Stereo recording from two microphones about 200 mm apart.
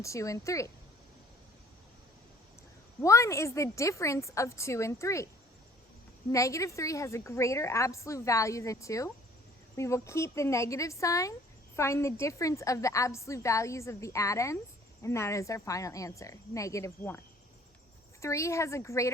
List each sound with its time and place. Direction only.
0.0 s a woman's voice: 15° left (ahead or behind)
3.0 s a woman's voice: 15° left (ahead or behind)
6.3 s a woman's voice: 15° left (ahead or behind)
18.2 s a woman's voice: 15° left (ahead or behind)